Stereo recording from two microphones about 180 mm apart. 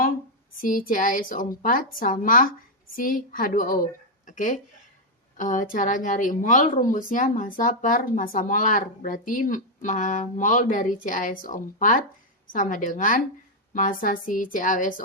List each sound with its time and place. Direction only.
0.6 s a woman's voice: 50° left (ahead or behind)